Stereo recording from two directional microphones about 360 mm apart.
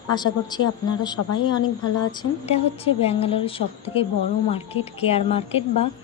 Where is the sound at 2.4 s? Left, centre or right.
Centre.